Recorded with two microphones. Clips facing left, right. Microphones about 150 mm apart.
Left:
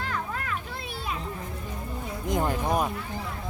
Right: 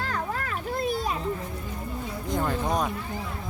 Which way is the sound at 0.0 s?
40° right (ahead or behind).